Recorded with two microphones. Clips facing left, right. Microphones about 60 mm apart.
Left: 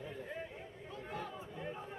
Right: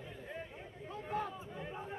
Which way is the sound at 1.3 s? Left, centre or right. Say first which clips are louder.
Left 1 dB; centre.